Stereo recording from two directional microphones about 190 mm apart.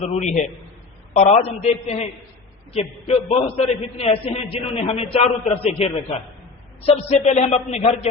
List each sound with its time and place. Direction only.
0.0 s a man's voice: 35° left (ahead or behind)